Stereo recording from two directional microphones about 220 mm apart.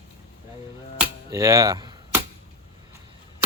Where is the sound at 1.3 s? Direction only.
15° right (ahead or behind).